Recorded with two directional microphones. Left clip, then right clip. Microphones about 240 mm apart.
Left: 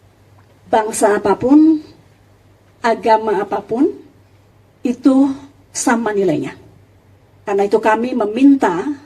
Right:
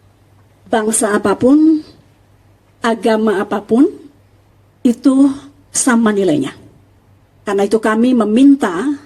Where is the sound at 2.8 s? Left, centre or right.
Right.